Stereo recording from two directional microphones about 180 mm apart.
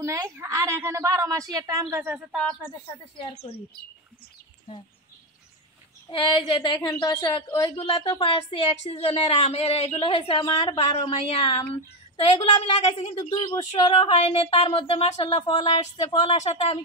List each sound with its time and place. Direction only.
0.0 s a woman's voice: 15° right (ahead or behind)
6.0 s a woman's voice: 30° left (ahead or behind)
16.3 s a woman's voice: 35° left (ahead or behind)